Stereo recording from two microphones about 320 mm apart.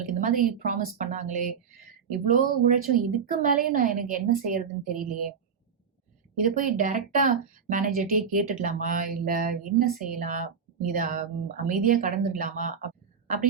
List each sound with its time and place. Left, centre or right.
0.0 s speech: right
6.6 s speech: right